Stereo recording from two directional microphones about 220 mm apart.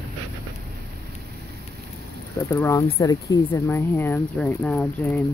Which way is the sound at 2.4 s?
15° left (ahead or behind).